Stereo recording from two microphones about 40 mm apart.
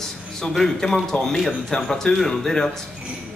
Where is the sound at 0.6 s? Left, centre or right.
Centre.